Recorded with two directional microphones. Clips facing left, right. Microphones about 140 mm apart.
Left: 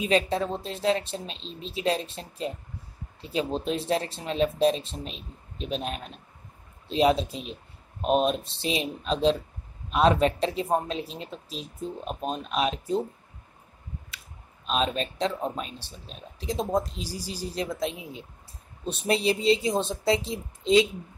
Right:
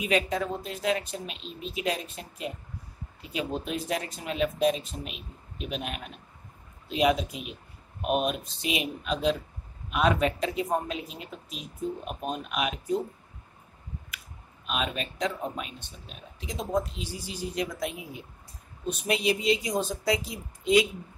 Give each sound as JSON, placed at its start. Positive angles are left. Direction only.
{"t": 0.0, "sound": "a woman's voice", "side_deg": 30}
{"t": 14.7, "sound": "a woman's voice", "side_deg": 35}